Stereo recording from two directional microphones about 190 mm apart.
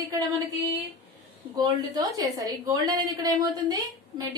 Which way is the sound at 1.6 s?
20° right (ahead or behind).